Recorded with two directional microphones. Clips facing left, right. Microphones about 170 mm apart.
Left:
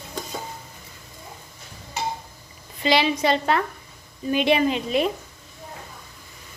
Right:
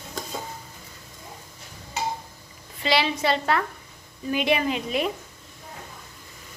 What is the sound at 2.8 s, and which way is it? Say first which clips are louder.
A woman's voice: left 3 dB; 20° left (ahead or behind).